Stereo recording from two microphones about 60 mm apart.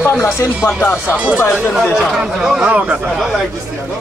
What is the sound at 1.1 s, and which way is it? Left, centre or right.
Speech, centre.